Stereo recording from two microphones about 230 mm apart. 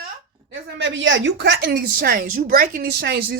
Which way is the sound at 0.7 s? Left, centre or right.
Right.